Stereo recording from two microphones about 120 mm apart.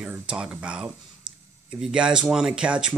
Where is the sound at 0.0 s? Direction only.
10° right (ahead or behind).